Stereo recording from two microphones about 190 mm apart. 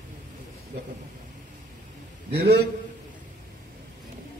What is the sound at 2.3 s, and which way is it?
Speech, 55° right (ahead or behind).